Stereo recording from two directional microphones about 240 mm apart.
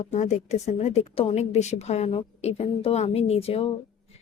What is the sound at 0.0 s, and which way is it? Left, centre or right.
A woman's voice, left.